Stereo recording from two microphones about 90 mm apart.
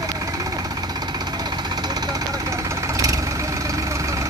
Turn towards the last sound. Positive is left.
turn(degrees=-35)  # may be behind; listen again after turning